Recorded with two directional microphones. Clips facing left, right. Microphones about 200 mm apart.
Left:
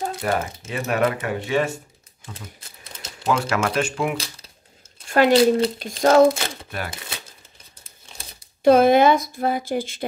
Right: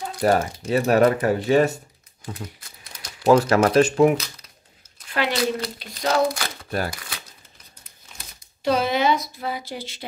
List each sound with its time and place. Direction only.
0.2 s speech: 35° right (ahead or behind)
3.3 s speech: 35° right (ahead or behind)
5.0 s a sound: 45° left (ahead or behind)
5.3 s speech: 25° left (ahead or behind)
8.6 s speech: 50° left (ahead or behind)